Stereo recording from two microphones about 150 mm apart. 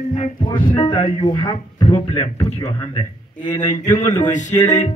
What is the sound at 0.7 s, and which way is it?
Speech, 35° left (ahead or behind).